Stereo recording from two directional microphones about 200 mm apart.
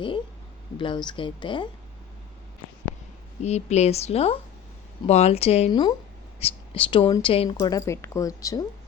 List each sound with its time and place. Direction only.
0.8 s speech: 25° left (ahead or behind)
3.4 s a woman's voice: 35° left (ahead or behind); by 8.6 s 15° left (ahead or behind)